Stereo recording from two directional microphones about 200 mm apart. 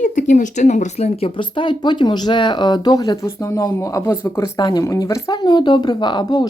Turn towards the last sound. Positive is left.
turn(degrees=20)  # may be behind; listen again after turning